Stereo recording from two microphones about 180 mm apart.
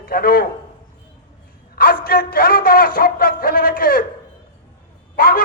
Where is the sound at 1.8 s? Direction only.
55° left (ahead or behind).